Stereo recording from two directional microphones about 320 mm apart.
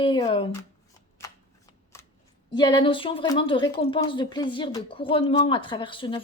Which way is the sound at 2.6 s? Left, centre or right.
Centre.